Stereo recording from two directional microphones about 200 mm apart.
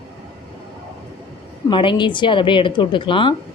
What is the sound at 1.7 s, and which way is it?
A woman's voice, 25° left (ahead or behind).